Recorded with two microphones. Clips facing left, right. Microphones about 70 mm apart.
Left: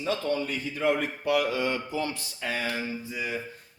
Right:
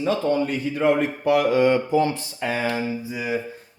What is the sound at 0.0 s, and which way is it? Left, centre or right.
Speech, right.